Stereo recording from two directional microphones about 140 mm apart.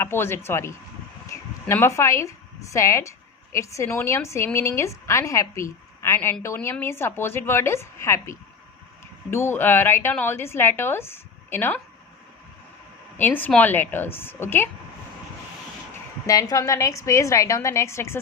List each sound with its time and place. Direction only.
0.0 s a woman's voice: 15° left (ahead or behind)
13.1 s a woman's voice: 10° left (ahead or behind)
16.2 s a woman's voice: 25° left (ahead or behind)